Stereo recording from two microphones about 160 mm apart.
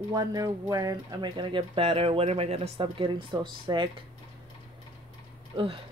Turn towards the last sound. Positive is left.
turn(degrees=-30)  # may be behind; listen again after turning